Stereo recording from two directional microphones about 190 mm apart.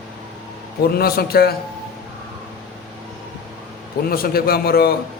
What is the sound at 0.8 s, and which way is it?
Speech, 55° left (ahead or behind).